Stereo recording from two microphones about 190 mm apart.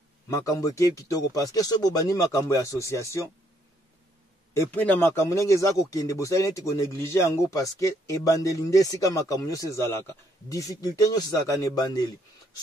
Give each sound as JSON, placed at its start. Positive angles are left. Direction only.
{"t": 0.3, "sound": "speech", "side_deg": 15}
{"t": 4.6, "sound": "speech", "side_deg": 10}